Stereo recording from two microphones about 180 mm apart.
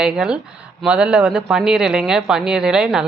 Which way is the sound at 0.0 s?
5° right (ahead or behind).